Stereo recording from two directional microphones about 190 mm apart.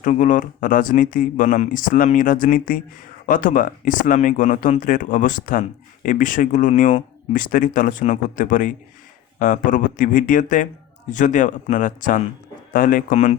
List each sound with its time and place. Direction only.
0.0 s speech: 40° left (ahead or behind)